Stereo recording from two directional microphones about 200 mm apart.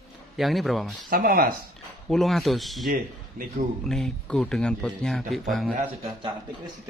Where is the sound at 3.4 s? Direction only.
45° right (ahead or behind).